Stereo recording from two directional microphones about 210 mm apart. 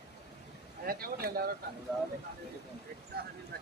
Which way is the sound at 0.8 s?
45° right (ahead or behind).